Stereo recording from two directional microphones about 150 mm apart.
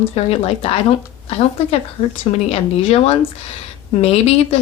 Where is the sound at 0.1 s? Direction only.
40° left (ahead or behind).